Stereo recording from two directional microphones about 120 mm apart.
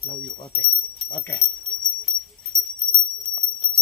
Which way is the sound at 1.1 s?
10° left (ahead or behind).